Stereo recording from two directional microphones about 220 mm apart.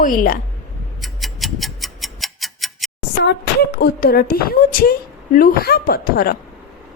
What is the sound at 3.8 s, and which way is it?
A woman's voice, 40° left (ahead or behind).